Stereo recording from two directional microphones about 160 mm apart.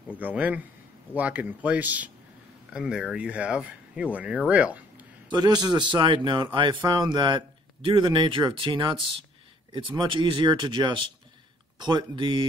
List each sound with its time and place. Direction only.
0.2 s speech: 10° right (ahead or behind)
5.3 s speech: 25° right (ahead or behind)